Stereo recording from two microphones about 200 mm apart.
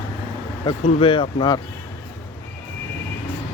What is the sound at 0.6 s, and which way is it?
Speech, 25° left (ahead or behind).